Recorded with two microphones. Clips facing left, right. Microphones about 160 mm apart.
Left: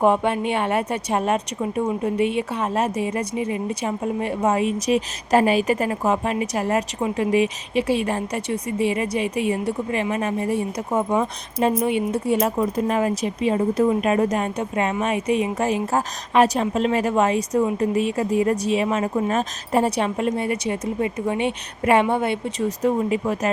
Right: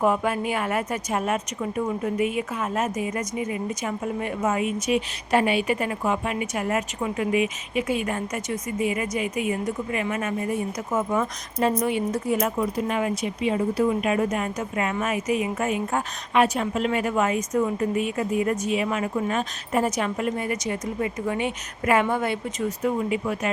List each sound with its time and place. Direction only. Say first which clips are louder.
0.0 s a woman's voice: left 4 dB; 25° left (ahead or behind)
12.5 s a woman's voice: left 4 dB; 40° left (ahead or behind)
22.8 s a woman's voice: left 4 dB; 35° left (ahead or behind)